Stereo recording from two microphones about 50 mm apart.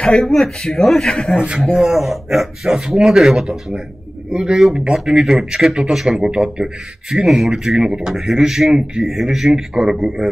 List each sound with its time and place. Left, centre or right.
0.2 s a man's voice: centre
1.3 s a man's voice: centre
1.7 s a man's voice: centre
7.2 s a man's voice: centre
7.5 s a man's voice: centre